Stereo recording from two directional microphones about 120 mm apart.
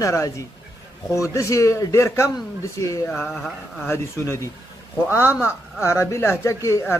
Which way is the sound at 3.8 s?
20° left (ahead or behind).